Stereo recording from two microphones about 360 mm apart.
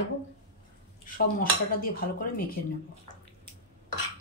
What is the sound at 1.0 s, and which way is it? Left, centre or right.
Dishes, left.